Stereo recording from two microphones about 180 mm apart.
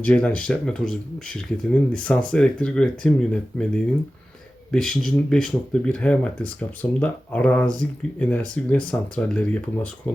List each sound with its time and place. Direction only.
0.0 s speech: 10° left (ahead or behind)